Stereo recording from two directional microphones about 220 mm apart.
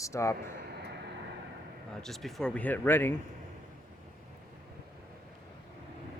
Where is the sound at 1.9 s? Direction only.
Centre (ahead or behind).